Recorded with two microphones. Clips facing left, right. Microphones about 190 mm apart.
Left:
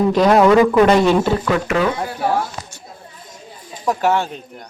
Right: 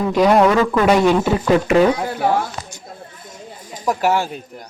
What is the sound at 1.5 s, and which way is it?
Speech, 25° right (ahead or behind).